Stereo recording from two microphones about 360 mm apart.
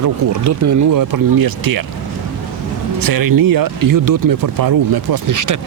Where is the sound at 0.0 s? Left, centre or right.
Right.